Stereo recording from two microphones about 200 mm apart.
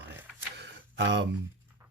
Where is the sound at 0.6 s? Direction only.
60° right (ahead or behind).